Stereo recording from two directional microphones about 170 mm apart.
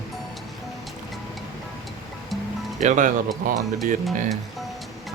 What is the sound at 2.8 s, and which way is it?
Speech, 45° right (ahead or behind).